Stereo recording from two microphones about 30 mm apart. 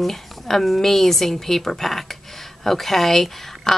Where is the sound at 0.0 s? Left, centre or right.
Centre.